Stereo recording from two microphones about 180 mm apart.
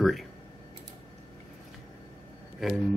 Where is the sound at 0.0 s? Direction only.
Centre (ahead or behind).